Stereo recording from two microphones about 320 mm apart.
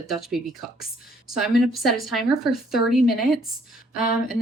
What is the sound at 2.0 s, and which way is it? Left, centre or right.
Speech, centre.